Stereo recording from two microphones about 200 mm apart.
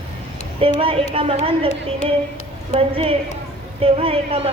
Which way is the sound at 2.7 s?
30° right (ahead or behind).